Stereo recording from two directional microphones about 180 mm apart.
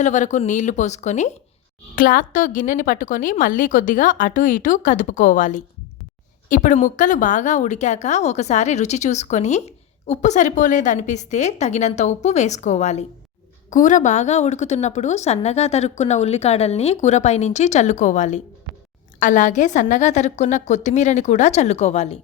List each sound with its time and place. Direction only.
0.0 s a woman's voice: 40° left (ahead or behind)